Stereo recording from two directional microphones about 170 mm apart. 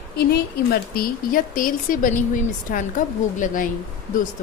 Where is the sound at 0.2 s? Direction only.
65° left (ahead or behind); by 3.7 s 50° left (ahead or behind).